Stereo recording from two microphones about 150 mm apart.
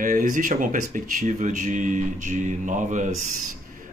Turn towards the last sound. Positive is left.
turn(degrees=-55)  # may be behind; listen again after turning